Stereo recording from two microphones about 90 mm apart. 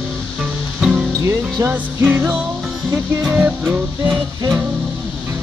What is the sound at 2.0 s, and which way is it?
Music, 20° right (ahead or behind).